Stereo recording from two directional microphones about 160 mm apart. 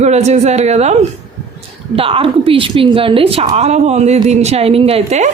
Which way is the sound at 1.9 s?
35° right (ahead or behind).